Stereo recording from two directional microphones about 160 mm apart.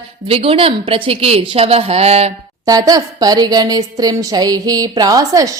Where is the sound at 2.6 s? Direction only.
20° right (ahead or behind).